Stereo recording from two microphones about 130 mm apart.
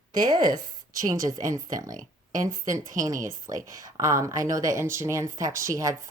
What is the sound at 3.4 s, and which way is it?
Speech, 25° right (ahead or behind).